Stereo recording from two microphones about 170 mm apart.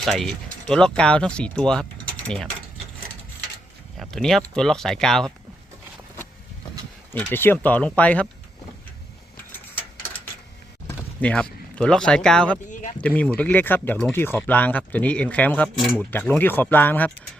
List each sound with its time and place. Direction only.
0.0 s speech: centre (ahead or behind)
3.9 s speech: centre (ahead or behind)
7.1 s speech: 10° left (ahead or behind)
10.8 s speech: 10° left (ahead or behind)
12.7 s a sound: 45° left (ahead or behind)
13.0 s speech: 10° left (ahead or behind)